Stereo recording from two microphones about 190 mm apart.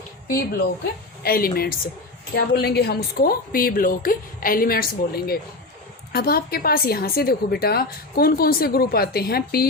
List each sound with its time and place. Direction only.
1.2 s a woman's voice: 50° left (ahead or behind)